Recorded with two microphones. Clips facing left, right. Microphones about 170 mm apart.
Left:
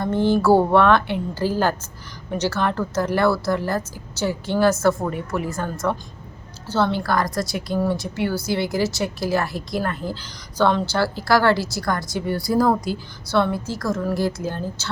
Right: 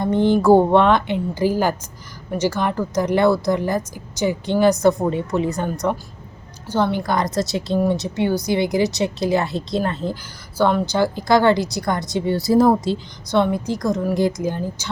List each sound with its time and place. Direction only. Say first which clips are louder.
0.0 s a woman's voice: right 2 dB; 15° right (ahead or behind)
10.2 s a woman's voice: right 1 dB; 10° right (ahead or behind)